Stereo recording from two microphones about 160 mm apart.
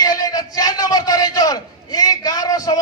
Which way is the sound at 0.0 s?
25° left (ahead or behind).